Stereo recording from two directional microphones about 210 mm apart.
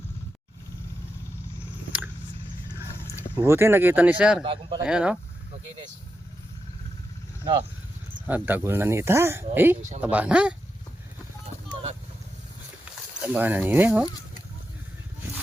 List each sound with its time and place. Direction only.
3.2 s speech: 10° right (ahead or behind)
4.4 s speech: 25° right (ahead or behind)
4.8 s speech: 5° right (ahead or behind)
8.3 s speech: 10° right (ahead or behind)
11.7 s vehicle: 30° right (ahead or behind)
13.2 s speech: 10° right (ahead or behind)